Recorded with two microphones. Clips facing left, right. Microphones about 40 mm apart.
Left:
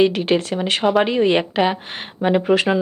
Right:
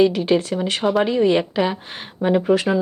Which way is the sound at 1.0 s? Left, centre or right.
Left.